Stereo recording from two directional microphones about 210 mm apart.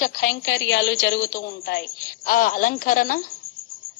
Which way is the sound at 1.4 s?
40° left (ahead or behind).